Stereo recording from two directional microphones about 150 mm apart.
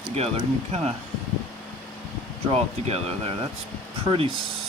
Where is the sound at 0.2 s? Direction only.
45° right (ahead or behind).